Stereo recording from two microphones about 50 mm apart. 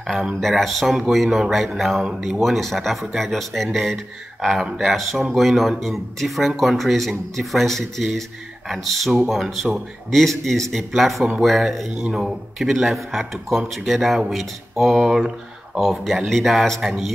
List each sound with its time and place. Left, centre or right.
0.0 s speech: centre
15.8 s speech: centre
16.8 s speech: centre